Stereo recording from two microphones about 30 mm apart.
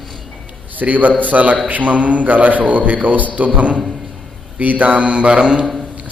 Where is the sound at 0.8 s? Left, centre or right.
Right.